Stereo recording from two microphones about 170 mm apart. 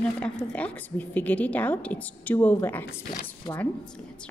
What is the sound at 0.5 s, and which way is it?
A woman's voice, 10° left (ahead or behind).